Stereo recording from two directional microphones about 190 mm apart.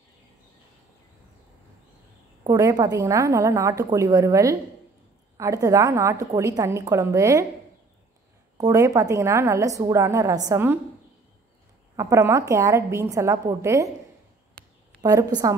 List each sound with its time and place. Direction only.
2.4 s a woman's voice: 20° right (ahead or behind)
8.5 s a woman's voice: 20° right (ahead or behind)
12.0 s a woman's voice: 15° right (ahead or behind)
15.0 s a woman's voice: 20° right (ahead or behind)